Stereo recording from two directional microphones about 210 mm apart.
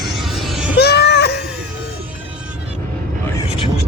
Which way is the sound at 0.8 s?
50° left (ahead or behind).